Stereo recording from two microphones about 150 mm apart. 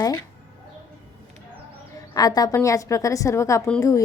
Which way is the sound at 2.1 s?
25° left (ahead or behind).